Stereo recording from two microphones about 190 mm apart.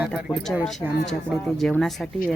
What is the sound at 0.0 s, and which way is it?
Speech, 5° right (ahead or behind).